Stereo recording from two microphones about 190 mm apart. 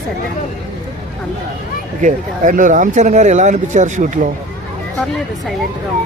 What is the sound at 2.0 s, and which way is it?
Speech, 45° right (ahead or behind).